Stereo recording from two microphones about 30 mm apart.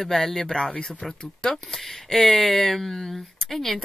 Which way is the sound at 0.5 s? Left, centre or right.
Left.